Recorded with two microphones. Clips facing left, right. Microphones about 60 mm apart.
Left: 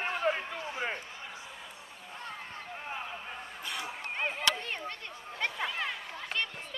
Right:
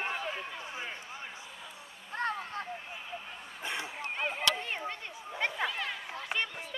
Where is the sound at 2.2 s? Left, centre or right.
Right.